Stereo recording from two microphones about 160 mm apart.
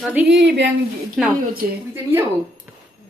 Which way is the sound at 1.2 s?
Centre (ahead or behind).